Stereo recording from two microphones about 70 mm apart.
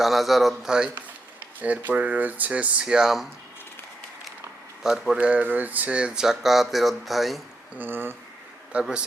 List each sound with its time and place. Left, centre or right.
0.0 s a man's voice: centre
1.6 s speech: right
4.8 s a man's voice: centre
5.1 s speech: right; by 7.4 s centre
7.8 s speech: right
8.7 s speech: centre